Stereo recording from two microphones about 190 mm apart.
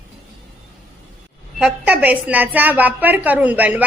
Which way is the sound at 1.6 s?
5° right (ahead or behind).